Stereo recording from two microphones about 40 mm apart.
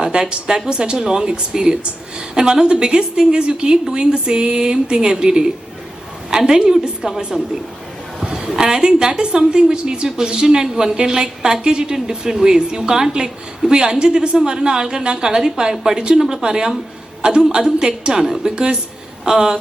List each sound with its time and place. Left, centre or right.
0.0 s a woman's voice: right
8.2 s a woman's voice: centre